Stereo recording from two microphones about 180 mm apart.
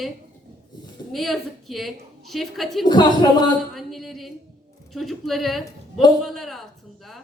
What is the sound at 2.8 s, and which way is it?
Speech, 25° left (ahead or behind).